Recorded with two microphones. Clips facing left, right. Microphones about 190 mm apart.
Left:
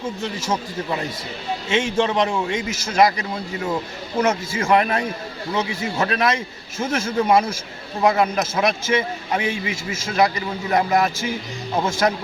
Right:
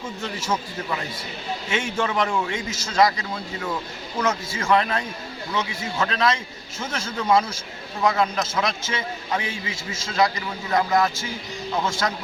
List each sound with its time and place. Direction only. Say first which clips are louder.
1.7 s a man's voice: left 5 dB; 25° left (ahead or behind)